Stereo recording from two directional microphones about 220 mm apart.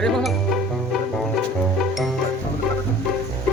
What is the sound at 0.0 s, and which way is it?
Speech, centre (ahead or behind).